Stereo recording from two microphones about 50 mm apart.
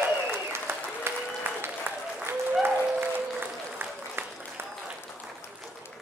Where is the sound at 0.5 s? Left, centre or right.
Right.